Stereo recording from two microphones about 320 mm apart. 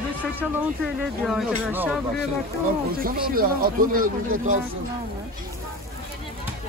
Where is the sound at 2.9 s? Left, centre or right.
Right.